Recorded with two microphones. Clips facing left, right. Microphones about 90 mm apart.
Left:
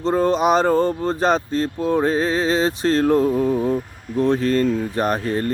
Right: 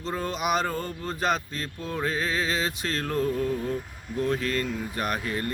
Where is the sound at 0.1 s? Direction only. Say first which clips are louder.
Left 10 dB; 35° left (ahead or behind).